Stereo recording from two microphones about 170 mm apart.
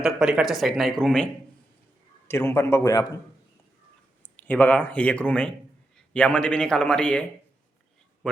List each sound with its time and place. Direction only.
0.0 s speech: 5° right (ahead or behind)
2.2 s a man's voice: 15° left (ahead or behind)
4.2 s speech: 10° left (ahead or behind)